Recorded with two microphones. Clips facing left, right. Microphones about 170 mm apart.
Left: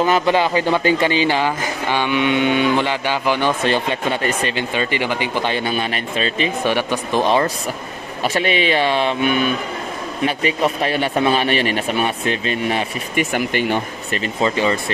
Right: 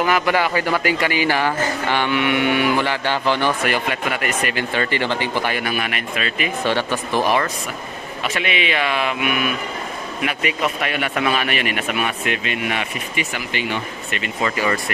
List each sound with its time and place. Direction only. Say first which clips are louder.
0.0 s a man's voice: left 2 dB; 25° left (ahead or behind)
6.6 s a man's voice: right 1 dB; 15° left (ahead or behind); by 12.8 s 35° left (ahead or behind)
13.1 s speech: left 9 dB; 50° left (ahead or behind)
14.2 s a man's voice: left 3 dB; 25° left (ahead or behind)